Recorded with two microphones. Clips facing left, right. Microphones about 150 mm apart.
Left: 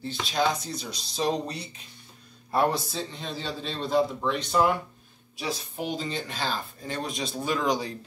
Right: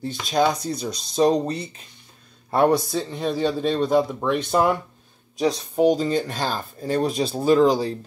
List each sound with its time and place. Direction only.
0.1 s speech: 40° right (ahead or behind)
2.5 s speech: 55° right (ahead or behind)
5.4 s speech: 40° right (ahead or behind)